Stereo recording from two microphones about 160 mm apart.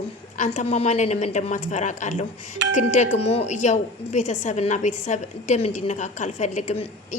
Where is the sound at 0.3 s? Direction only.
45° left (ahead or behind).